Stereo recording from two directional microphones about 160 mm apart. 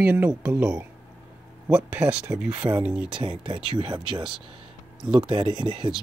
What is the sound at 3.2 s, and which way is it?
Speech, 35° right (ahead or behind).